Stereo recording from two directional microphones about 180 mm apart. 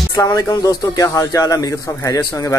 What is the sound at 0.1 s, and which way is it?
Speech, 20° left (ahead or behind).